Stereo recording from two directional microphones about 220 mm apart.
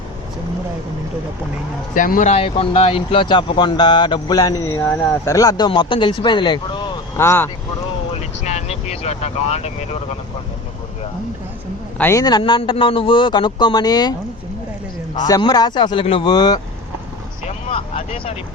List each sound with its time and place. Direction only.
2.0 s speech: 35° left (ahead or behind); by 7.5 s 10° left (ahead or behind)
8.1 s vehicle: 30° left (ahead or behind)
11.9 s speech: 10° left (ahead or behind)
15.2 s speech: 20° left (ahead or behind)
17.7 s vehicle: 25° left (ahead or behind)